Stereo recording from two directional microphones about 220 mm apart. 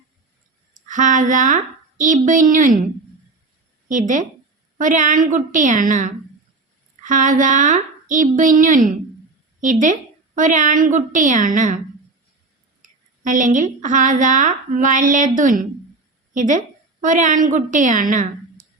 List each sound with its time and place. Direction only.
0.9 s a woman's voice: 35° right (ahead or behind)
3.8 s a woman's voice: 35° right (ahead or behind)
12.8 s a woman's voice: 35° right (ahead or behind)